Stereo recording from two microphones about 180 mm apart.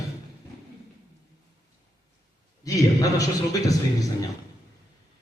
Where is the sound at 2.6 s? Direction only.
20° left (ahead or behind).